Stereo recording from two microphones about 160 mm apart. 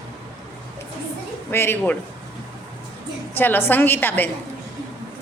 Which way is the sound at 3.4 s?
15° left (ahead or behind).